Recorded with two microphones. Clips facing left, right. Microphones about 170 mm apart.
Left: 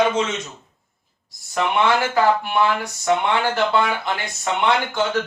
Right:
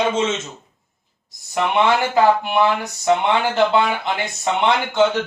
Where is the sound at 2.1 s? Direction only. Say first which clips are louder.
Right 2 dB; 20° right (ahead or behind).